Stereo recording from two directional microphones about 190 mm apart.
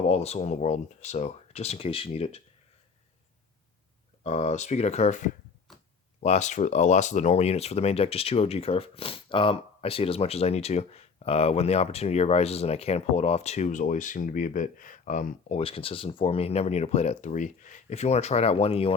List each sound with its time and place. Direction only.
0.1 s speech: 35° left (ahead or behind)
4.2 s speech: 40° left (ahead or behind)